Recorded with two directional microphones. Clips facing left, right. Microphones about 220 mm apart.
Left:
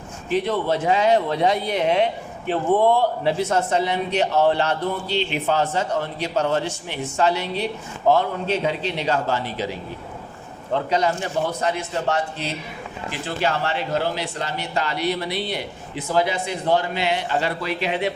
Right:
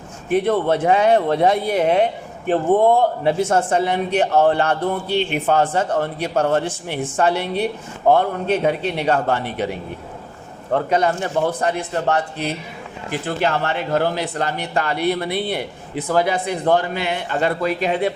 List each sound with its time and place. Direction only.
0.3 s a man's voice: 55° right (ahead or behind)